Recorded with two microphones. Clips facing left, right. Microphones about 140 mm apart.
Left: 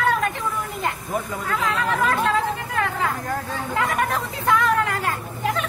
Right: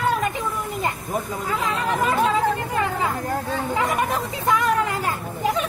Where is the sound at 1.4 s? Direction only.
15° right (ahead or behind).